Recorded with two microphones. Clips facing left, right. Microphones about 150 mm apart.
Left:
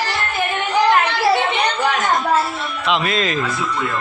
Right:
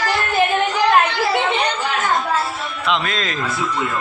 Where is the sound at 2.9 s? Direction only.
5° left (ahead or behind).